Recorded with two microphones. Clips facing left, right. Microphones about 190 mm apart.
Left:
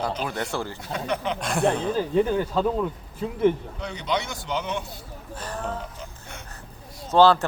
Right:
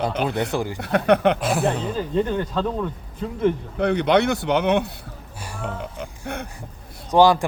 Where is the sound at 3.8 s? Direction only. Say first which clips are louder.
Right 10 dB; 60° right (ahead or behind).